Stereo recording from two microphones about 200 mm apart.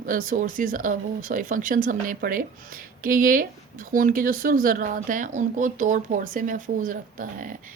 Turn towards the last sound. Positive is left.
turn(degrees=-40)  # may be behind; listen again after turning